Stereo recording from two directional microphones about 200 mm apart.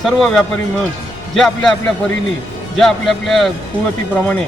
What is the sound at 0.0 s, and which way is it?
Speech, centre (ahead or behind).